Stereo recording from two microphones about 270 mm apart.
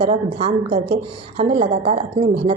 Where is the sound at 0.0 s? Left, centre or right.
Right.